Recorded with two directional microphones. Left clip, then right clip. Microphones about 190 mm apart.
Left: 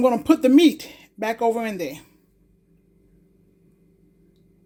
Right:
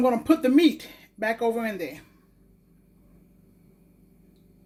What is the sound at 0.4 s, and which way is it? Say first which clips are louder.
Speech: left 5 dB; 45° left (ahead or behind).